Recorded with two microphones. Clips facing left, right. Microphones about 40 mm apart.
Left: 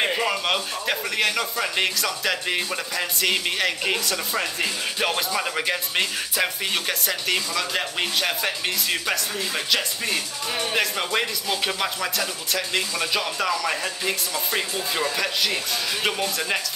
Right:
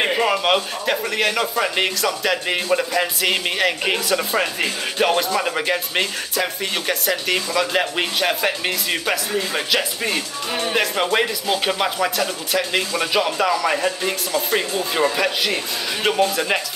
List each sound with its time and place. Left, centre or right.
0.0 s a sound: centre
0.8 s speech: centre
2.0 s speech: centre
2.4 s speech: centre
5.0 s speech: centre
6.3 s speech: centre
7.3 s speech: centre